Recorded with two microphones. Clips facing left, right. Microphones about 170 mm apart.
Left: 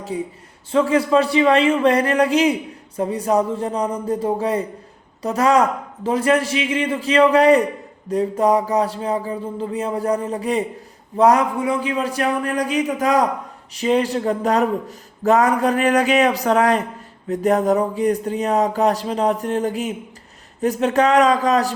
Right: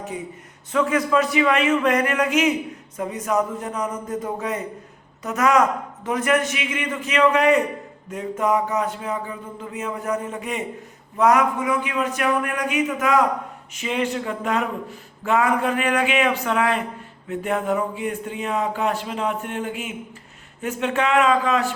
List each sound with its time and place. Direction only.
0.1 s speech: 35° left (ahead or behind)